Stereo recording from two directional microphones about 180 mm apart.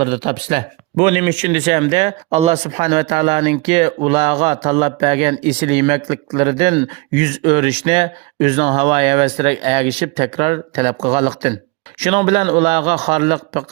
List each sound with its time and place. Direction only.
0.0 s speech: 30° right (ahead or behind)